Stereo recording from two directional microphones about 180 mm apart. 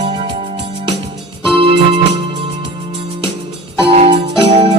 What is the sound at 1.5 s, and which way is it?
Keyboard, 30° right (ahead or behind).